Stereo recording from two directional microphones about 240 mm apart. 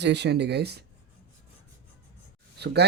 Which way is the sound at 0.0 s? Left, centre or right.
Right.